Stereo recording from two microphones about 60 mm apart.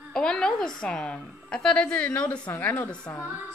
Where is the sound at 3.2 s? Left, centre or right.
Right.